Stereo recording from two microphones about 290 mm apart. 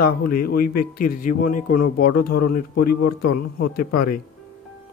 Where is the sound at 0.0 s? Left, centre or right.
Left.